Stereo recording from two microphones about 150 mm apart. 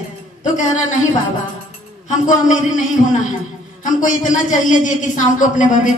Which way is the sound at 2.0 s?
55° left (ahead or behind).